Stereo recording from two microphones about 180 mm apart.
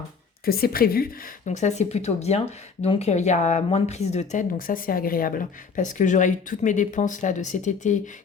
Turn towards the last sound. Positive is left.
turn(degrees=45)  # may be behind; listen again after turning